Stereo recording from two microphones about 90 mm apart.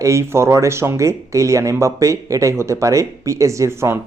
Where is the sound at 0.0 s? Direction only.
35° right (ahead or behind).